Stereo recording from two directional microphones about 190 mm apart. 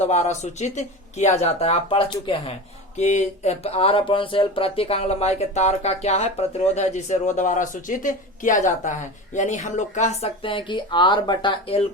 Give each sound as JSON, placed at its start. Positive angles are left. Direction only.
{"t": 0.0, "sound": "speech", "side_deg": 35}
{"t": 3.0, "sound": "speech", "side_deg": 40}